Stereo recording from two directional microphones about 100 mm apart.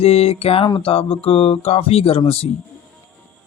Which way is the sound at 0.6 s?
60° left (ahead or behind).